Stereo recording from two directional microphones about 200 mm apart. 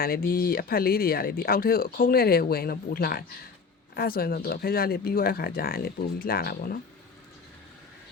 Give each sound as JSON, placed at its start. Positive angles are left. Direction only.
{"t": 0.0, "sound": "speech", "side_deg": 45}